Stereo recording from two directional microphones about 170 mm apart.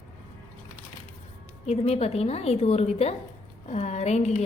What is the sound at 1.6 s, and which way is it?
A woman's voice, 35° left (ahead or behind).